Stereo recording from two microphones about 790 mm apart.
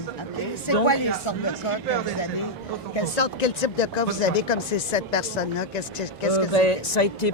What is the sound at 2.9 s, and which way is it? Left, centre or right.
Speech, left.